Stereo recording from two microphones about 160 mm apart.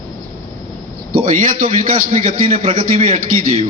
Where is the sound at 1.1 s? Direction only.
60° right (ahead or behind).